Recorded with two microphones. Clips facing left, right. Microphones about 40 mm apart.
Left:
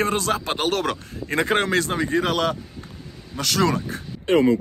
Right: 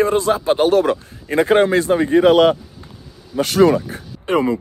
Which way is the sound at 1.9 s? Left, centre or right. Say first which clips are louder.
Right 10 dB; right.